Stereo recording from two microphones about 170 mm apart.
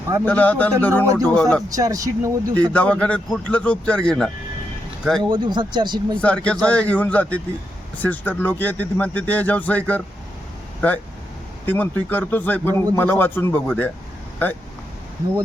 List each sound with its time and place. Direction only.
0.3 s speech: 10° left (ahead or behind)
1.7 s speech: 20° right (ahead or behind)
2.7 s speech: 5° left (ahead or behind)
5.3 s speech: 25° right (ahead or behind)
6.1 s speech: 5° left (ahead or behind)